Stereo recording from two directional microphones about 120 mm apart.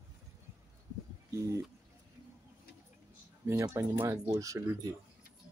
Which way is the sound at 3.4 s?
25° right (ahead or behind).